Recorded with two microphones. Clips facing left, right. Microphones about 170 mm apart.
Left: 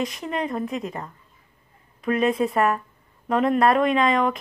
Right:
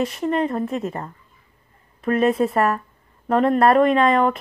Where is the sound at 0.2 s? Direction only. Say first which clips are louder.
Right 5 dB; 35° right (ahead or behind).